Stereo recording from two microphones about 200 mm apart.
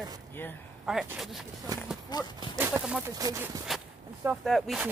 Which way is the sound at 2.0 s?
20° left (ahead or behind).